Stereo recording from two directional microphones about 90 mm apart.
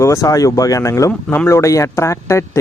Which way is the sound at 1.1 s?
20° left (ahead or behind).